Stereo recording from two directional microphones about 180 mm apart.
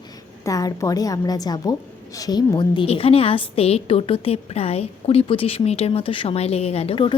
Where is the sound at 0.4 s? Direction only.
20° left (ahead or behind).